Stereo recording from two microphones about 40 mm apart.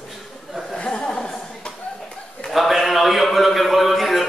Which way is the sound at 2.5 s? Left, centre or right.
Centre.